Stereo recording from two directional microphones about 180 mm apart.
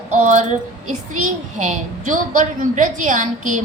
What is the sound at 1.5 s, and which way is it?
A woman's voice, 45° right (ahead or behind).